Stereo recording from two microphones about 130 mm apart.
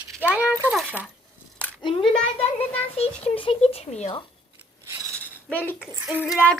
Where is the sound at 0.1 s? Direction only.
15° right (ahead or behind).